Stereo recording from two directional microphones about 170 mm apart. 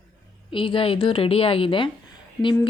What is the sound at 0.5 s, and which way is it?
Speech, 30° left (ahead or behind).